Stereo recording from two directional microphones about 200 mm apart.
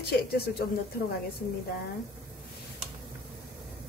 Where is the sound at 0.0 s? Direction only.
50° left (ahead or behind).